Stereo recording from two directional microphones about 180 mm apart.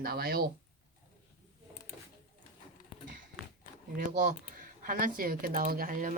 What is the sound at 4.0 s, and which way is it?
Speech, 40° right (ahead or behind).